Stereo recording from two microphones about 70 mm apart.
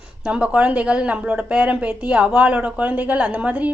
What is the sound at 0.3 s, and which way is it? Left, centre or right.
Speech, centre.